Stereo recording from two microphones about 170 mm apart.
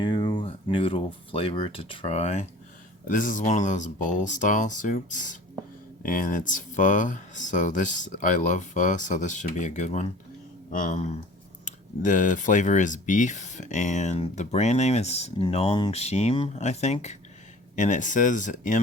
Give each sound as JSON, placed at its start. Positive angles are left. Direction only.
{"t": 0.0, "sound": "speech", "side_deg": 25}
{"t": 3.1, "sound": "speech", "side_deg": 55}